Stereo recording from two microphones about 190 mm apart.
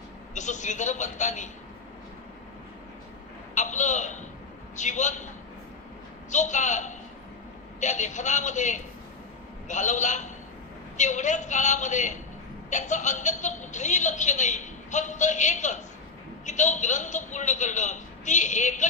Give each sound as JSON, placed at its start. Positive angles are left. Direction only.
{"t": 0.3, "sound": "a woman's voice", "side_deg": 40}
{"t": 3.5, "sound": "a sound", "side_deg": 40}
{"t": 4.7, "sound": "a woman's voice", "side_deg": 40}
{"t": 6.3, "sound": "a woman's voice", "side_deg": 40}